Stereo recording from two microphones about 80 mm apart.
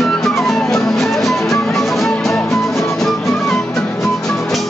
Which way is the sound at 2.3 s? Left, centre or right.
Left.